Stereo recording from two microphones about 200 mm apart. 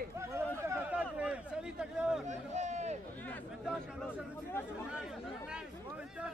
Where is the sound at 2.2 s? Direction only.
35° right (ahead or behind).